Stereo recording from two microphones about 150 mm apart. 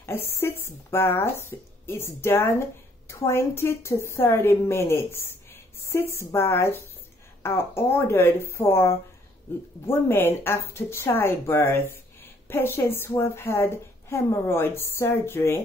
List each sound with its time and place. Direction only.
0.0 s a woman's voice: 15° left (ahead or behind)